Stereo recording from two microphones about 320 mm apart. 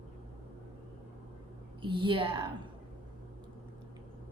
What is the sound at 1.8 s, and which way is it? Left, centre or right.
Speech, centre.